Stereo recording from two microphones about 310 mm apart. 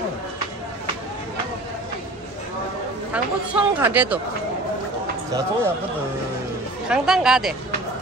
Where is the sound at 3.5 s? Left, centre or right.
Centre.